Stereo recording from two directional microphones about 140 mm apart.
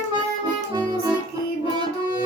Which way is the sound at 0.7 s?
30° right (ahead or behind).